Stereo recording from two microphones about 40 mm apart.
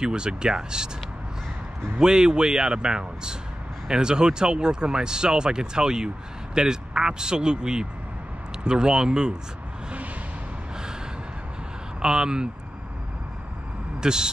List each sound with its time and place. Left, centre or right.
0.0 s speech: centre
2.0 s speech: centre
12.0 s speech: centre
14.0 s speech: centre